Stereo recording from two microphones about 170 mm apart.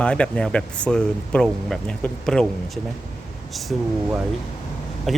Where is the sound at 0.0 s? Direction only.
5° left (ahead or behind).